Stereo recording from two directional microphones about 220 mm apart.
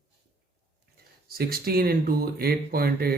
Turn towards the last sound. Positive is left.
turn(degrees=-45)  # may be behind; listen again after turning